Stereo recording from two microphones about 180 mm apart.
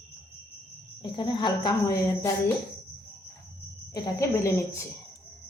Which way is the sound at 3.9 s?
15° left (ahead or behind).